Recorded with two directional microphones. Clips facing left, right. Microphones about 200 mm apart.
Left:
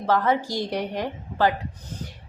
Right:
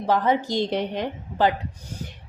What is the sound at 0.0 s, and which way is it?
A woman's voice, 15° right (ahead or behind).